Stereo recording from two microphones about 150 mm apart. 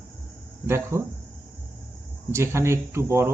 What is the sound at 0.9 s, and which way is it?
Speech, 20° right (ahead or behind).